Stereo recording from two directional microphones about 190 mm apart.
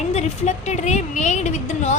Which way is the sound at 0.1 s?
35° left (ahead or behind).